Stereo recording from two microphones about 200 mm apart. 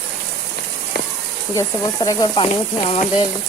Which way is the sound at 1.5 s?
15° left (ahead or behind).